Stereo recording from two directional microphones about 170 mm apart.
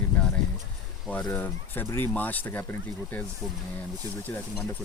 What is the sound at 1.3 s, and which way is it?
Speech, 10° left (ahead or behind).